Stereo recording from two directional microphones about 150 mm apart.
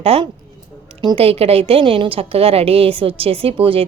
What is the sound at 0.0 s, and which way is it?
A woman's voice, 40° right (ahead or behind).